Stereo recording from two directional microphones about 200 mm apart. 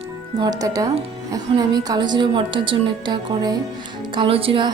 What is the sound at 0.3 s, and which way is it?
Speech, 20° right (ahead or behind).